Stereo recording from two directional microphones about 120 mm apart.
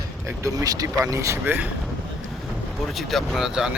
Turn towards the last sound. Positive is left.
turn(degrees=-5)  # may be behind; listen again after turning